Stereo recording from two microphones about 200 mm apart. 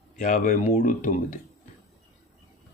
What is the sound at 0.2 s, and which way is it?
A man's voice, 40° left (ahead or behind).